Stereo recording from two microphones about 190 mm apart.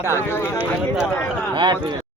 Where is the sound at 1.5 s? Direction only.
25° right (ahead or behind).